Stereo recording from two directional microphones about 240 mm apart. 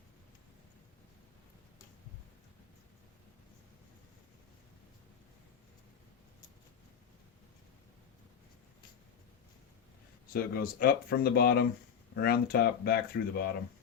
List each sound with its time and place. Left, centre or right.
10.3 s speech: left